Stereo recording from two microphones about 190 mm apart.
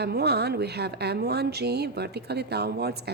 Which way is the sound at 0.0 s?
60° right (ahead or behind).